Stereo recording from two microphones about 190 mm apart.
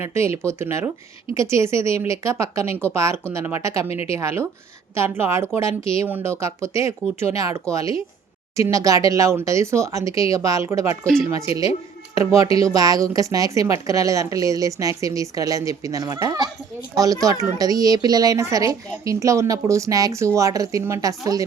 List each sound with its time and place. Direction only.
0.0 s speech: 15° right (ahead or behind)
3.8 s a woman's voice: 35° left (ahead or behind)
4.1 s speech: 15° right (ahead or behind)
11.0 s speech: centre (ahead or behind)
12.1 s speech: 15° right (ahead or behind)